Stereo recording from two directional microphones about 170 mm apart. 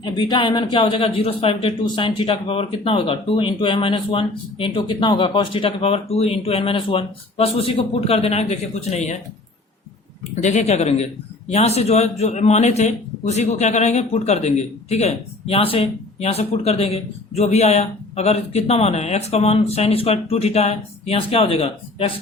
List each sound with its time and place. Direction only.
0.0 s a man's voice: 25° left (ahead or behind); by 9.1 s 40° left (ahead or behind)
10.4 s a man's voice: 40° left (ahead or behind)